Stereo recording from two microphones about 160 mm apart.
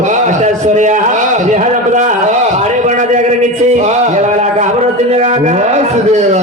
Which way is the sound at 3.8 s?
45° right (ahead or behind).